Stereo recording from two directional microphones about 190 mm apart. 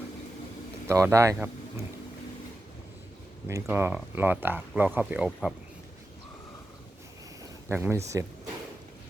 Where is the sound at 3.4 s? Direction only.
10° right (ahead or behind).